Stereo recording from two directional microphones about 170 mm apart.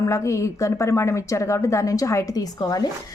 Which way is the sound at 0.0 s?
20° left (ahead or behind).